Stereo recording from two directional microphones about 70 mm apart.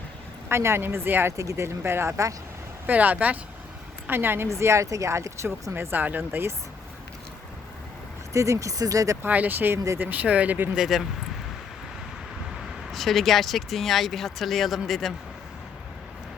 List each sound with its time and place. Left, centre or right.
0.4 s speech: right
1.4 s speech: right
2.8 s a woman's voice: right
4.4 s speech: right
8.3 s speech: right
9.2 s speech: right
9.7 s speech: right
10.0 s speech: right
10.8 s speech: centre
12.9 s speech: centre